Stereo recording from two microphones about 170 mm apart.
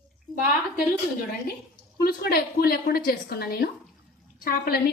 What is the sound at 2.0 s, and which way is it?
A woman's voice, 65° left (ahead or behind).